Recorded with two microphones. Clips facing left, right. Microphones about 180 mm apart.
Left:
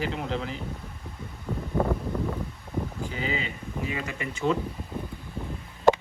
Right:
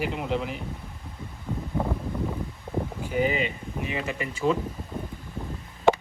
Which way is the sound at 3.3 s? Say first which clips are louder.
Right 3 dB; 20° right (ahead or behind).